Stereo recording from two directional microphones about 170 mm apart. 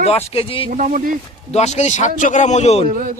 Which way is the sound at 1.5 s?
40° left (ahead or behind).